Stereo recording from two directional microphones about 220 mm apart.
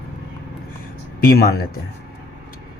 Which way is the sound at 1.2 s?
45° left (ahead or behind).